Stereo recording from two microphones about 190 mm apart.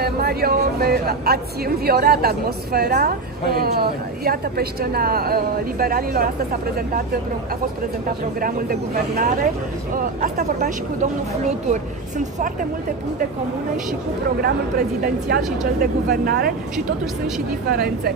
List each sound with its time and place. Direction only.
0.0 s a woman's voice: 55° right (ahead or behind)
8.4 s a woman's voice: 50° right (ahead or behind)
11.7 s speech: 40° right (ahead or behind)
14.4 s a woman's voice: 50° right (ahead or behind)
17.6 s a woman's voice: 55° right (ahead or behind)